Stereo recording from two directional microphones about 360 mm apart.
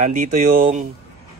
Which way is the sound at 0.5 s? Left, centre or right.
Right.